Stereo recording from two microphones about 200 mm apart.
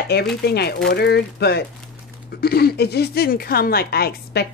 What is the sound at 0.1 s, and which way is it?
A woman's voice, 55° left (ahead or behind).